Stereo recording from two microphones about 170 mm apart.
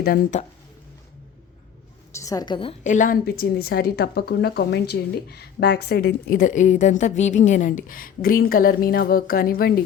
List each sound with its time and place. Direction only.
2.1 s a woman's voice: 20° left (ahead or behind)
2.8 s a woman's voice: 50° left (ahead or behind)